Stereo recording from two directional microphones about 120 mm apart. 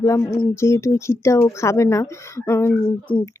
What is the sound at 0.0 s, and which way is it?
Speech, 25° left (ahead or behind).